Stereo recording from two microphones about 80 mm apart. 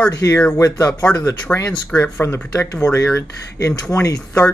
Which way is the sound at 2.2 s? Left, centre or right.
Left.